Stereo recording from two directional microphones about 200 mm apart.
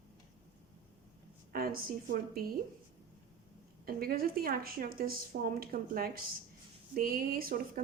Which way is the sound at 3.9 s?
50° right (ahead or behind).